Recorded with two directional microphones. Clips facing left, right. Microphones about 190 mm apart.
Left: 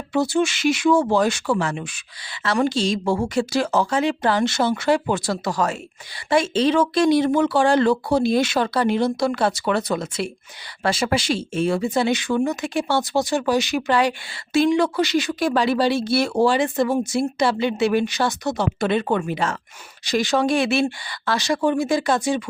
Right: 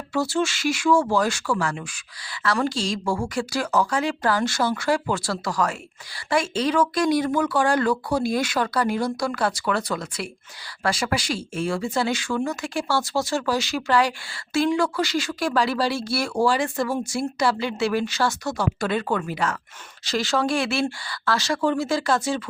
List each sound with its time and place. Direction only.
0.1 s speech: 20° left (ahead or behind)